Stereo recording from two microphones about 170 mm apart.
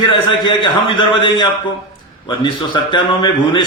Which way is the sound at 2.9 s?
30° left (ahead or behind).